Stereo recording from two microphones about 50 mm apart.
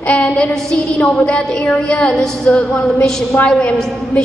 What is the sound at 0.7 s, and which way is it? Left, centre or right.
A woman's voice, left.